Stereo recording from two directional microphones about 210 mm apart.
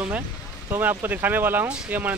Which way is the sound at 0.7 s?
10° right (ahead or behind).